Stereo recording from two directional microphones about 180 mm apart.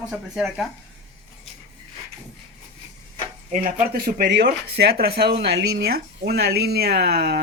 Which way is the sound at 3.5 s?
50° right (ahead or behind).